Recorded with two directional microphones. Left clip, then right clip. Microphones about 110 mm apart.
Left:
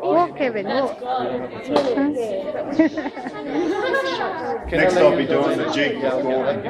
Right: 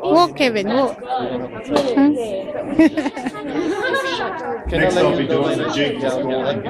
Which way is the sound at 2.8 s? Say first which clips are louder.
Right 5 dB; 30° right (ahead or behind).